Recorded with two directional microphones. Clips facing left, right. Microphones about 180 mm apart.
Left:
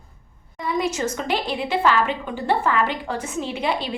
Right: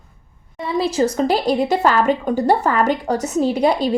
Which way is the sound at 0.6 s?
30° right (ahead or behind).